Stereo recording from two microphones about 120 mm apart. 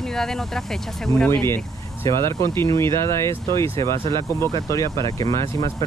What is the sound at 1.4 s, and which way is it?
Speech, 20° left (ahead or behind).